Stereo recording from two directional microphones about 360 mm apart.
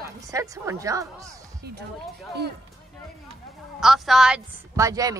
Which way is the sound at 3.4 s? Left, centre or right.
Centre.